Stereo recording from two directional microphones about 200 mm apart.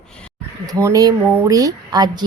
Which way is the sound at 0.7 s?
15° right (ahead or behind).